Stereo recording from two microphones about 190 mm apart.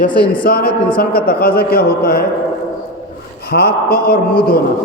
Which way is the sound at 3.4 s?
55° left (ahead or behind).